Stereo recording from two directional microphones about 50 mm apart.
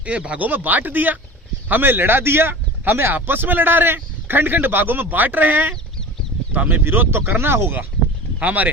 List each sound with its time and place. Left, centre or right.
0.0 s a man's voice: right
6.8 s speech: right
8.4 s a man's voice: right